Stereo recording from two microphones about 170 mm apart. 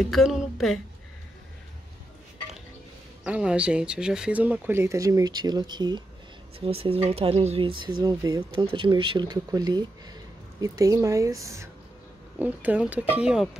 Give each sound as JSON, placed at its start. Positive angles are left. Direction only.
{"t": 0.0, "sound": "a woman's voice", "side_deg": 0}
{"t": 3.3, "sound": "speech", "side_deg": -5}